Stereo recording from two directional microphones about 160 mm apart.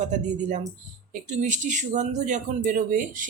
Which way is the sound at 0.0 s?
50° right (ahead or behind).